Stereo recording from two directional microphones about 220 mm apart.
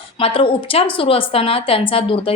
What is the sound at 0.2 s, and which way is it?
A woman's voice, 25° left (ahead or behind).